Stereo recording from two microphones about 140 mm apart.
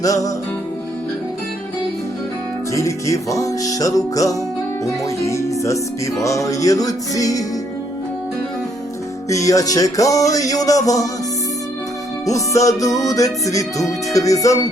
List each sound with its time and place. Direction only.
0.0 s music: 25° left (ahead or behind)
2.7 s music: 20° left (ahead or behind)
9.3 s music: 25° left (ahead or behind)
12.2 s music: 25° left (ahead or behind)